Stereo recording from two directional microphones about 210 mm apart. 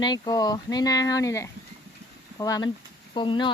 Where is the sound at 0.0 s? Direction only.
20° left (ahead or behind).